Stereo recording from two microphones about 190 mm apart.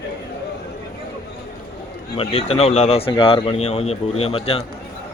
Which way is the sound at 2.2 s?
30° left (ahead or behind).